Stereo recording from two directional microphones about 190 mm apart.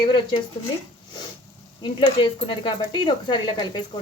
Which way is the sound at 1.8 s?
25° left (ahead or behind).